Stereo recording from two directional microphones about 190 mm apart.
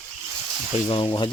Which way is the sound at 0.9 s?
30° left (ahead or behind).